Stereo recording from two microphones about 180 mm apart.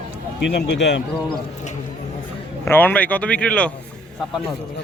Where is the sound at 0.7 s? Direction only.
80° left.